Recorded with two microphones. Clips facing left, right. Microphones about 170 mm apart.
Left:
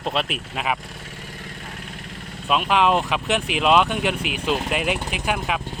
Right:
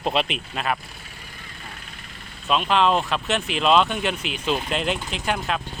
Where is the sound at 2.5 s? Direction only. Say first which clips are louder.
Left 1 dB; 10° left (ahead or behind).